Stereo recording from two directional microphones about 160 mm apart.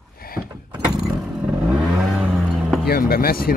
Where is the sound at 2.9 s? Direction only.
70° left (ahead or behind).